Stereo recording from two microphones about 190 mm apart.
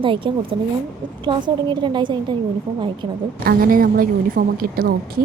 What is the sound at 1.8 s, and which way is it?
Speech, 25° right (ahead or behind).